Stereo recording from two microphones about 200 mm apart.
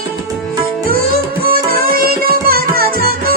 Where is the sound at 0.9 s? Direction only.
50° right (ahead or behind).